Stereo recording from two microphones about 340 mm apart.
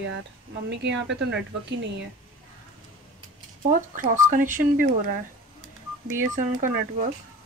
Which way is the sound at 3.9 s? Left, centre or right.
Right.